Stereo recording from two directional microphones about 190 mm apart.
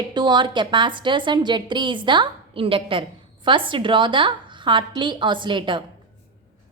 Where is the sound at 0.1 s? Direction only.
25° right (ahead or behind).